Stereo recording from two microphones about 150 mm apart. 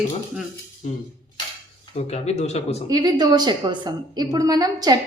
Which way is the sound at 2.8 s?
25° right (ahead or behind).